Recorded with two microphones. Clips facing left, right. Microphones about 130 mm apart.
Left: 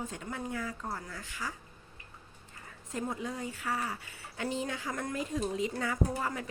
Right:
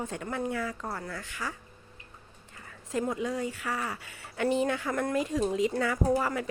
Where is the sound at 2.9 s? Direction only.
90° right.